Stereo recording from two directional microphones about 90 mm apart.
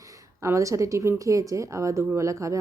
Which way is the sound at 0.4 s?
35° right (ahead or behind).